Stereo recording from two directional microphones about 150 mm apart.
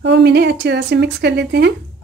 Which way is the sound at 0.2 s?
90° right.